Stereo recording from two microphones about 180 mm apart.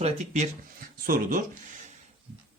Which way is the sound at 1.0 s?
50° right (ahead or behind).